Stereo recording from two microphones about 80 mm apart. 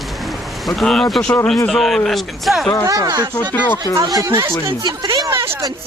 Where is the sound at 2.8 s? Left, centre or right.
Right.